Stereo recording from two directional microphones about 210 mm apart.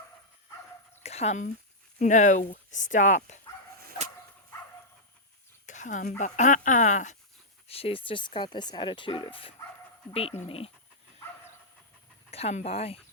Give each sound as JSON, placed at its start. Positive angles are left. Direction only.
{"t": 1.0, "sound": "speech", "side_deg": 30}
{"t": 5.6, "sound": "speech", "side_deg": 35}
{"t": 12.3, "sound": "speech", "side_deg": 30}